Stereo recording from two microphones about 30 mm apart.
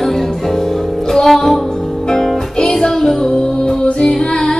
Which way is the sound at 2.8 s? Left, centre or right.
Left.